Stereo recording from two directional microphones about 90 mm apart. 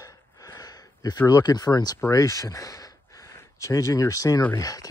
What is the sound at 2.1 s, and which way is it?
Speech, 35° left (ahead or behind).